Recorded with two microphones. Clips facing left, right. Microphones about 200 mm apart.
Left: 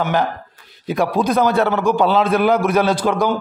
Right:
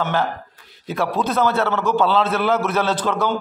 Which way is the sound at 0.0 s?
15° left (ahead or behind).